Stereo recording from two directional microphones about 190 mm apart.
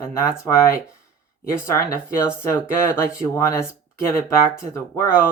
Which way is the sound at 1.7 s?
15° left (ahead or behind).